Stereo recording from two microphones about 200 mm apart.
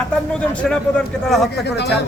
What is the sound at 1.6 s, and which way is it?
Speech, 60° left (ahead or behind).